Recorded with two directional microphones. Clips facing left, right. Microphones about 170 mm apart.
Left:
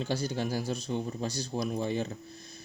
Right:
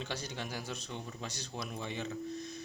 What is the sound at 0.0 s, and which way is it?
Speech, 35° left (ahead or behind).